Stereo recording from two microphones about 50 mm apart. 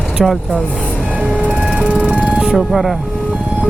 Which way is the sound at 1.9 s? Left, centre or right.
Right.